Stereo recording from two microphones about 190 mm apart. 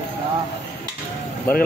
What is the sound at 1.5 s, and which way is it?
Speech, 10° left (ahead or behind).